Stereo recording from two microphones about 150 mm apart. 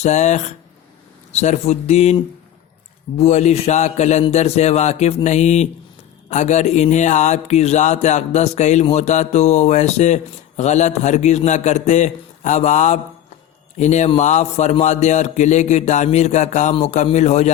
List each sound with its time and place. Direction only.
0.0 s mantra: 50° left (ahead or behind)
3.2 s mantra: 50° left (ahead or behind)